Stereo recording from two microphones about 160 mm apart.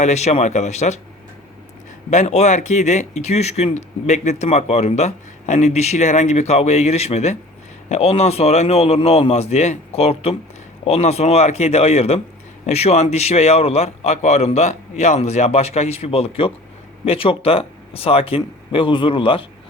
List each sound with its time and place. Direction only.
0.0 s speech: 45° left (ahead or behind)
2.0 s speech: 45° left (ahead or behind)